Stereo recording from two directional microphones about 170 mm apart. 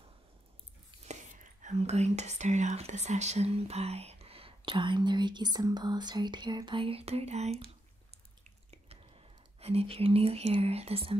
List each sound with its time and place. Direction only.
1.6 s speech: 40° right (ahead or behind)
8.5 s whispering: 40° right (ahead or behind)